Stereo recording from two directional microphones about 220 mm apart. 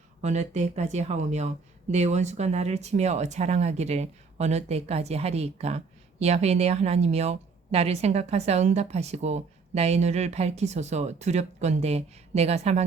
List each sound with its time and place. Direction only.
0.2 s speech: 30° right (ahead or behind)